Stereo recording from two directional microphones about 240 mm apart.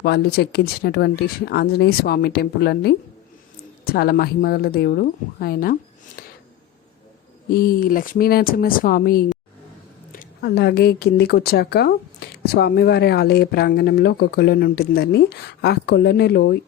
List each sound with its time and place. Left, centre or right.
0.0 s speech: left
6.2 s a sound: left
7.5 s speech: left